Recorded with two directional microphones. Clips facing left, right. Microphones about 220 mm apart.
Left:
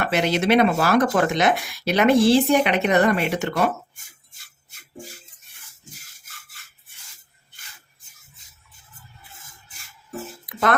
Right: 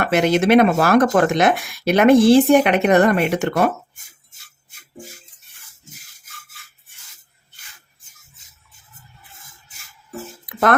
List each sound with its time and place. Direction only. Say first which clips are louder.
0.0 s speech: right 5 dB; 50° right (ahead or behind)